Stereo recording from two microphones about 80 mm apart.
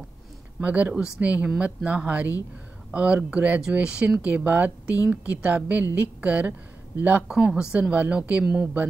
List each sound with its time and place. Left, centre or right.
0.6 s a woman's voice: centre
7.2 s a woman's voice: centre